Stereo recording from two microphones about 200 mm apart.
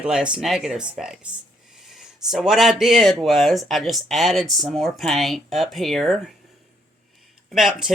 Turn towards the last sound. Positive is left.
turn(degrees=0)  # may be behind; listen again after turning